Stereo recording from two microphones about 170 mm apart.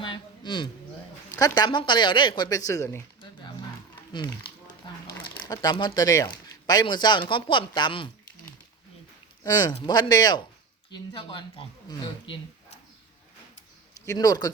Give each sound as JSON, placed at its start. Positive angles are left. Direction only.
{"t": 0.0, "sound": "a sound", "side_deg": 30}
{"t": 1.4, "sound": "speech", "side_deg": 20}
{"t": 5.5, "sound": "speech", "side_deg": 25}
{"t": 9.4, "sound": "speech", "side_deg": 25}
{"t": 13.9, "sound": "speech", "side_deg": 20}